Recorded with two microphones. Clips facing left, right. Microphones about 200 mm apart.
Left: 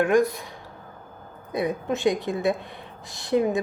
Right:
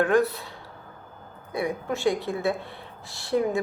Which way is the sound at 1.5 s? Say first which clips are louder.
Left 2 dB; 20° left (ahead or behind).